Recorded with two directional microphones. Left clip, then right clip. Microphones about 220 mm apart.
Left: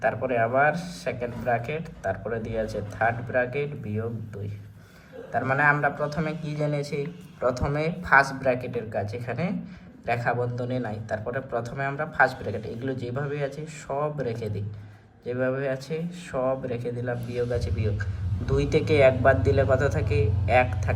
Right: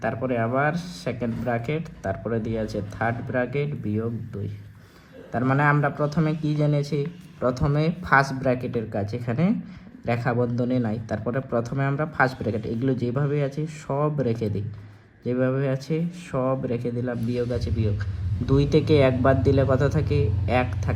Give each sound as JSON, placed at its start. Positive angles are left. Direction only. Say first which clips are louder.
{"t": 0.0, "sound": "speech", "louder": "left 2 dB", "side_deg": -10}
{"t": 5.3, "sound": "speech", "louder": "even", "side_deg": -15}